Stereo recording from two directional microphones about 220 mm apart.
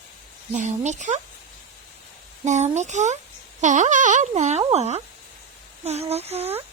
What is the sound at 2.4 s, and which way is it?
Speech, 30° right (ahead or behind).